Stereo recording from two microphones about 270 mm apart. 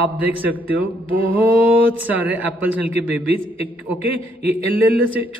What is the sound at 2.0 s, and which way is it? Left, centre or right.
A man's voice, centre.